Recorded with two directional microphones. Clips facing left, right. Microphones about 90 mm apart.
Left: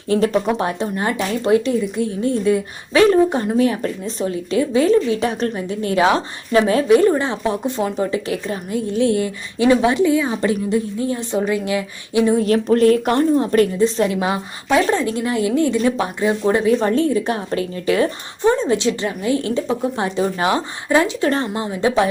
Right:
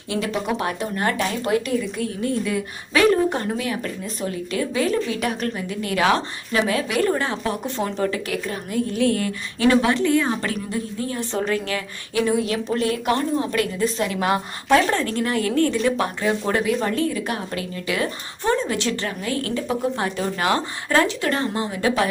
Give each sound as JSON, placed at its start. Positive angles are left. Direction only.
{"t": 0.1, "sound": "a woman's voice", "side_deg": 40}
{"t": 0.6, "sound": "a woman's voice", "side_deg": 25}
{"t": 10.1, "sound": "a woman's voice", "side_deg": 5}
{"t": 10.4, "sound": "a woman's voice", "side_deg": 20}
{"t": 12.4, "sound": "a woman's voice", "side_deg": 40}
{"t": 14.2, "sound": "a woman's voice", "side_deg": 10}
{"t": 16.6, "sound": "a woman's voice", "side_deg": 30}